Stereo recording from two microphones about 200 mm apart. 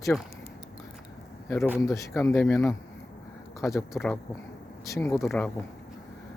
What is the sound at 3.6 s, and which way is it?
Speech, 15° left (ahead or behind).